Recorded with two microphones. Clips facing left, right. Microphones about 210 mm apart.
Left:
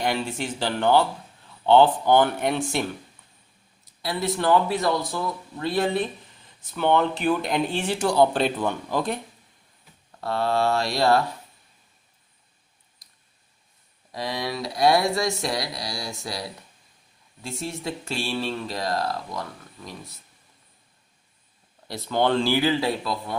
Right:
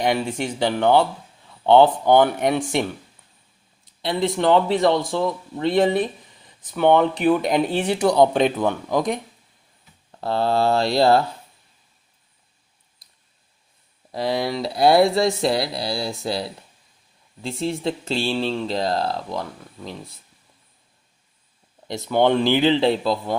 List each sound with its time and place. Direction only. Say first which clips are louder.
0.0 s speech: right 4 dB; 15° right (ahead or behind)
3.8 s a sound: right 5 dB; 25° right (ahead or behind)
4.4 s speech: right 3 dB; 20° right (ahead or behind)
10.1 s speech: right 3 dB; 30° right (ahead or behind)
14.1 s speech: right 6 dB; 30° right (ahead or behind)
21.8 s speech: right 4 dB; 20° right (ahead or behind)